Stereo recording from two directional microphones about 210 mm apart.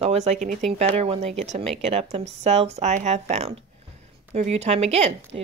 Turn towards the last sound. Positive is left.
turn(degrees=-30)  # may be behind; listen again after turning